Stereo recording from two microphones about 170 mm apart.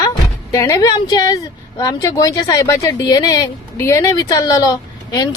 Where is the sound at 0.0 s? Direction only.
20° left (ahead or behind).